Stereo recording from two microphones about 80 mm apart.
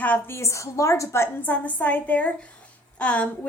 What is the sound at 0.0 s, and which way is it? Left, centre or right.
Speech, left.